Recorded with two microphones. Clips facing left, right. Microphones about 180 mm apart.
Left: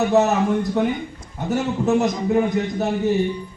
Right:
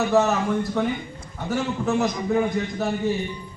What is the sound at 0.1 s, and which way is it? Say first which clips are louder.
A man's voice: left 3 dB; 20° left (ahead or behind).